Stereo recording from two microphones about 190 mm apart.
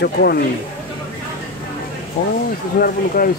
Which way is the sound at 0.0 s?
55° left (ahead or behind).